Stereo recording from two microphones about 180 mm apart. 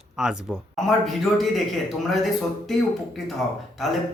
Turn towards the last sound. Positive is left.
turn(degrees=0)  # may be behind; listen again after turning